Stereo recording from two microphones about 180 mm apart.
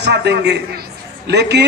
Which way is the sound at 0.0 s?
70° right (ahead or behind).